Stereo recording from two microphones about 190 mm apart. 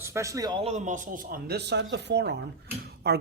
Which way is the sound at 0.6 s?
35° right (ahead or behind).